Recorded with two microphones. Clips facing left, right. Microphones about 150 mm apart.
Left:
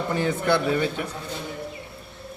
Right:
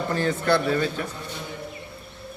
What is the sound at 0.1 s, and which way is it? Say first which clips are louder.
Speech: even; 15° left (ahead or behind).